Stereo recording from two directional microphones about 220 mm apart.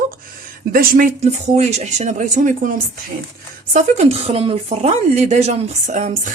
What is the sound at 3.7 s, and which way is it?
Speech, 30° right (ahead or behind).